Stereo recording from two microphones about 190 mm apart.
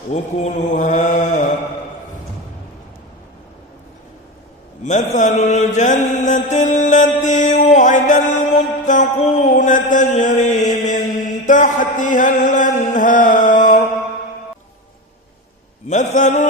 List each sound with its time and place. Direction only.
0.1 s mantra: 35° left (ahead or behind)
4.8 s mantra: 40° left (ahead or behind)
15.9 s mantra: 40° left (ahead or behind)